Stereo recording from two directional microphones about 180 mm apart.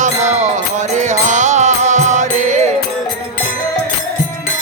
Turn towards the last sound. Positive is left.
turn(degrees=-40)  # may be behind; listen again after turning